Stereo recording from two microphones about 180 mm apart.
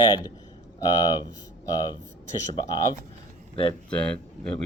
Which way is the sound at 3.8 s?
5° left (ahead or behind).